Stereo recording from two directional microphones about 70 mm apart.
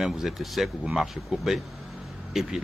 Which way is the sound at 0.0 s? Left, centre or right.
Centre.